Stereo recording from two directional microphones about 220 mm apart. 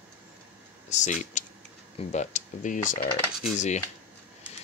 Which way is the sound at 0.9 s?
35° left (ahead or behind).